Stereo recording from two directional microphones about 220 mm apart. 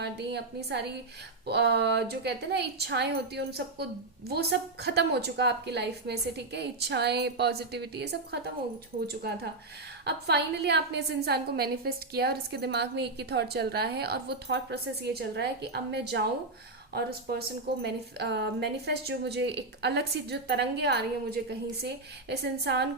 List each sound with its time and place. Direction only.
0.0 s a woman's voice: 50° right (ahead or behind)